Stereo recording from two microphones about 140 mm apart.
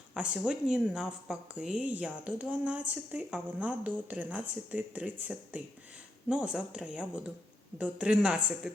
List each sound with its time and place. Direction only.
0.1 s a woman's voice: 5° right (ahead or behind)